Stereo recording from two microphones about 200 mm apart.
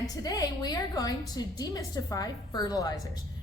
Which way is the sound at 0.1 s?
15° left (ahead or behind).